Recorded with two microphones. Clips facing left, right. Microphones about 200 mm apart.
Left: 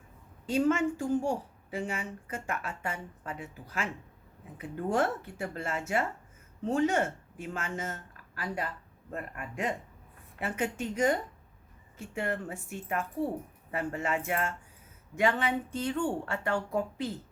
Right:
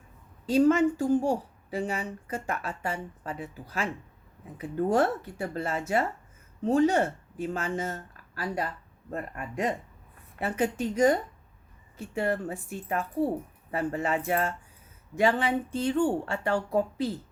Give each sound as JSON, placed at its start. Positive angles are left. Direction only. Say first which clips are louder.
{"t": 0.4, "sound": "a woman's voice", "louder": "right 5 dB", "side_deg": -35}
{"t": 9.0, "sound": "a woman's voice", "louder": "right 4 dB", "side_deg": -35}